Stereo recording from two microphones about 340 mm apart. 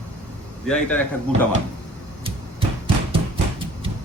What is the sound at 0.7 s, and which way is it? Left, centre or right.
Speech, centre.